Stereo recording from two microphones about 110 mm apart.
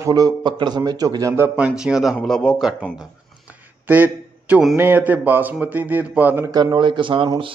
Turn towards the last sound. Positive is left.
turn(degrees=-50)  # may be behind; listen again after turning